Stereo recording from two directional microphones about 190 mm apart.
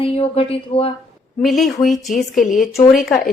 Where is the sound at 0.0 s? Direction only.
30° left (ahead or behind).